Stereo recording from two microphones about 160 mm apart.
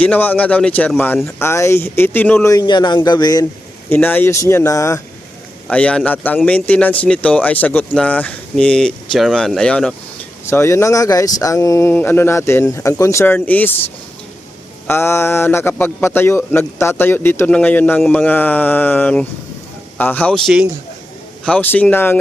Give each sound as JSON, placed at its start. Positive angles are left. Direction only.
{"t": 0.0, "sound": "speech", "side_deg": 10}
{"t": 2.5, "sound": "speech", "side_deg": 25}
{"t": 3.8, "sound": "speech", "side_deg": 10}
{"t": 5.6, "sound": "speech", "side_deg": 5}
{"t": 10.4, "sound": "speech", "side_deg": 15}